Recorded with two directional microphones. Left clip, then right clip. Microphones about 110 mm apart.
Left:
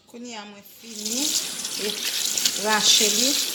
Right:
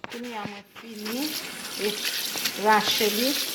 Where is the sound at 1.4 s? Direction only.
5° left (ahead or behind).